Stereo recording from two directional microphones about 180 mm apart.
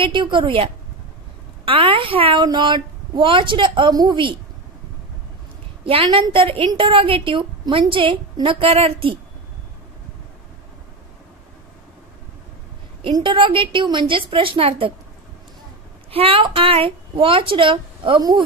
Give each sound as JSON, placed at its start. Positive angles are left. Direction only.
{"t": 0.0, "sound": "a woman's voice", "side_deg": -30}
{"t": 1.7, "sound": "a woman's voice", "side_deg": -30}
{"t": 5.9, "sound": "a woman's voice", "side_deg": -30}
{"t": 13.0, "sound": "a woman's voice", "side_deg": -30}
{"t": 16.1, "sound": "a woman's voice", "side_deg": -30}